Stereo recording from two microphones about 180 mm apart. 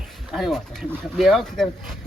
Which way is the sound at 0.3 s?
Centre (ahead or behind).